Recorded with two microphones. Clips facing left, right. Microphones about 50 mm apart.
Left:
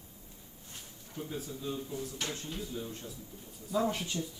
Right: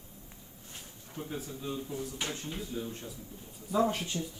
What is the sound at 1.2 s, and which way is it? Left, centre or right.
Speech, right.